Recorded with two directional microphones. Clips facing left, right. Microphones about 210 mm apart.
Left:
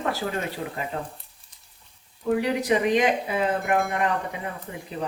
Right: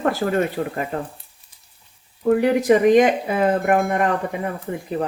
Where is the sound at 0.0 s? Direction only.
55° right (ahead or behind).